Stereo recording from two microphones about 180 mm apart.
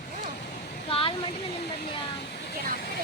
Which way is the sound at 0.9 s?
30° left (ahead or behind).